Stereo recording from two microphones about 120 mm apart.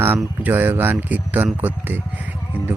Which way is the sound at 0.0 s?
15° right (ahead or behind).